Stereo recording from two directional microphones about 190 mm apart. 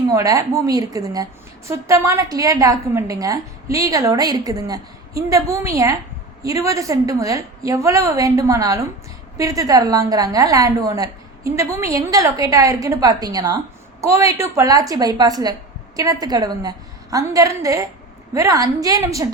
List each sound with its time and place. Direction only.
0.1 s a woman's voice: 15° right (ahead or behind)